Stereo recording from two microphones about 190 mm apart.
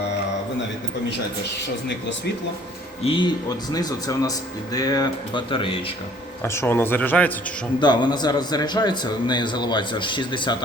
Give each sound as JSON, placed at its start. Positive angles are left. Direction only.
{"t": 3.0, "sound": "speech", "side_deg": 25}
{"t": 6.4, "sound": "speech", "side_deg": 15}
{"t": 7.8, "sound": "speech", "side_deg": 25}